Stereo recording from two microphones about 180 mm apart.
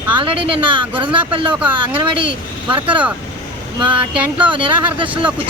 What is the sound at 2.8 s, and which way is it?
Speech, 10° right (ahead or behind).